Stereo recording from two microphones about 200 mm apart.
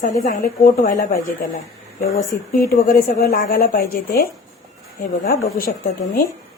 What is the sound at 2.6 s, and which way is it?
A woman's voice, 50° left (ahead or behind).